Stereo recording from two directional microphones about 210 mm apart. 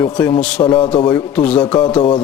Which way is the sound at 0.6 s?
25° left (ahead or behind).